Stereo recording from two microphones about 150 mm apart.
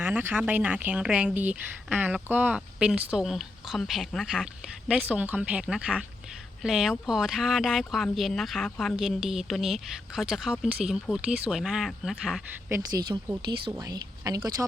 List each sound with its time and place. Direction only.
0.0 s speech: 15° right (ahead or behind)
12.7 s speech: 25° right (ahead or behind)